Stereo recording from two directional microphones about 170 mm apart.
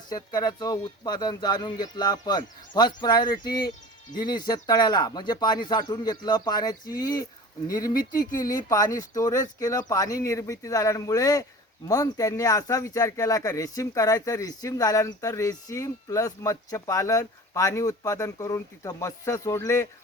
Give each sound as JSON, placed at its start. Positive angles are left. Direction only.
{"t": 0.1, "sound": "speech", "side_deg": 25}
{"t": 7.9, "sound": "speech", "side_deg": 55}
{"t": 8.5, "sound": "speech", "side_deg": 20}